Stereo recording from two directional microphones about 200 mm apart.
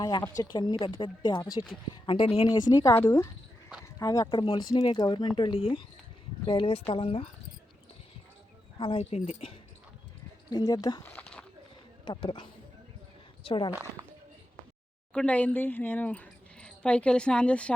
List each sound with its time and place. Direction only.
0.0 s speech: 20° left (ahead or behind)
8.8 s speech: 30° left (ahead or behind)
10.5 s speech: 20° left (ahead or behind)
11.1 s a sound: 5° left (ahead or behind)
12.0 s speech: 25° left (ahead or behind)
13.7 s speech: 10° right (ahead or behind)
15.1 s speech: 5° left (ahead or behind)